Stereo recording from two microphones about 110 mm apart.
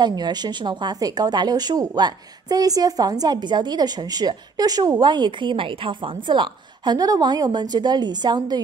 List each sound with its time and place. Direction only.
0.0 s speech: 40° right (ahead or behind)